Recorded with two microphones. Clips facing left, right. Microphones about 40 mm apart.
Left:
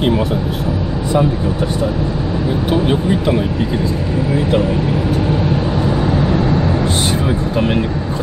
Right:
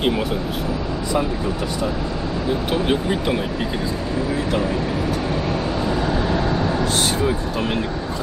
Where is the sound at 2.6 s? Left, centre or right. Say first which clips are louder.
Left 6 dB; centre.